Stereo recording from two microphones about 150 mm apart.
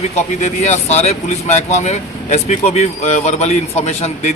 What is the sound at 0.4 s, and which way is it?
Speech, 50° left (ahead or behind).